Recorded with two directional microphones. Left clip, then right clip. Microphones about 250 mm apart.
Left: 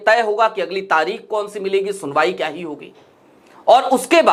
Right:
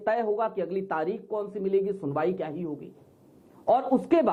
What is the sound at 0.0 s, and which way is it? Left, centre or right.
Speech, centre.